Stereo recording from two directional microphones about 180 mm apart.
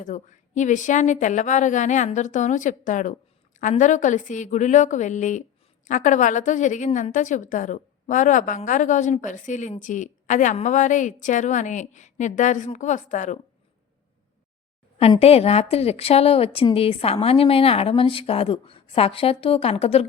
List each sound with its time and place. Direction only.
0.0 s a woman's voice: 40° left (ahead or behind)
14.9 s a woman's voice: 35° left (ahead or behind)